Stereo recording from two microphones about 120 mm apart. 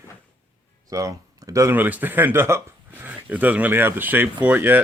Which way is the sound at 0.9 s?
30° right (ahead or behind).